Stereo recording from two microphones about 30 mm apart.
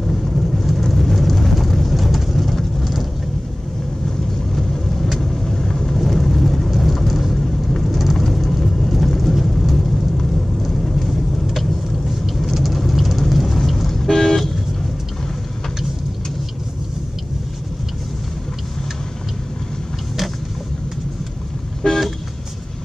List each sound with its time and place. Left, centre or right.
0.0 s vehicle: centre
0.8 s a sound: centre
5.2 s vehicle: centre
5.9 s vehicle: centre
7.3 s vehicle: centre
8.2 s a sound: centre
12.5 s vehicle: centre
21.8 s vehicle: centre